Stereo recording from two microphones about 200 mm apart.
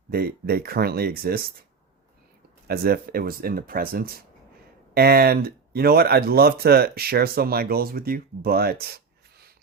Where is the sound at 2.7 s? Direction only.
50° right (ahead or behind).